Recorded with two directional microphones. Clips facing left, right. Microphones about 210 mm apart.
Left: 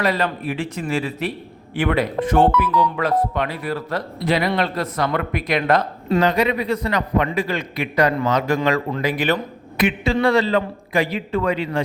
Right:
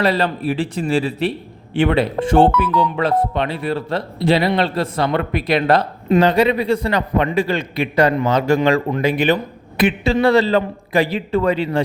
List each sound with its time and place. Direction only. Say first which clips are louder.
0.0 s a man's voice: right 3 dB; 30° right (ahead or behind)
9.7 s a man's voice: right 3 dB; 30° right (ahead or behind)